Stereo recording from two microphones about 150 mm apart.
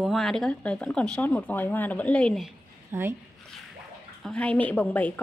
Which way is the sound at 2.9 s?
15° right (ahead or behind).